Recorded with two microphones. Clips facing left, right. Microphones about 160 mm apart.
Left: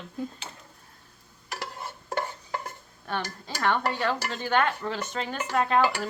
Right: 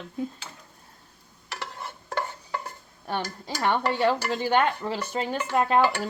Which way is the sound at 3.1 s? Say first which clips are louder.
Right 2 dB; 20° right (ahead or behind).